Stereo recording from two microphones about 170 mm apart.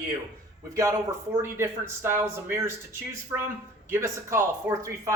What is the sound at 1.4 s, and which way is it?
Speech, 15° right (ahead or behind).